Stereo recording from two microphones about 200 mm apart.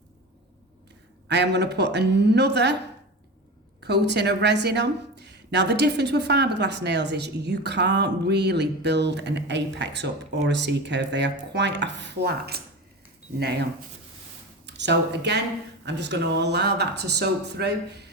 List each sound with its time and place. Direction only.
1.3 s speech: 60° right (ahead or behind)
3.8 s speech: 60° right (ahead or behind)
14.7 s speech: 60° right (ahead or behind)